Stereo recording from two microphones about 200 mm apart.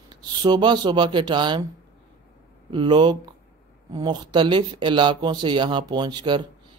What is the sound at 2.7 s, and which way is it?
Speech, 25° right (ahead or behind).